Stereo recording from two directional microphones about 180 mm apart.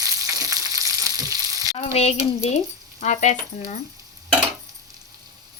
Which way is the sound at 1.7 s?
35° left (ahead or behind).